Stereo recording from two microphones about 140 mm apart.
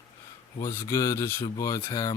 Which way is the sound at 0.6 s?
20° left (ahead or behind).